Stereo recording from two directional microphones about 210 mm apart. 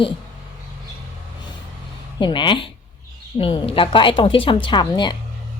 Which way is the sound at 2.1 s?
20° left (ahead or behind).